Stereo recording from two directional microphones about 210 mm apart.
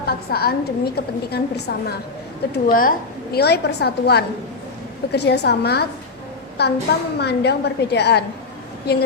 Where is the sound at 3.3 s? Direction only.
50° left (ahead or behind).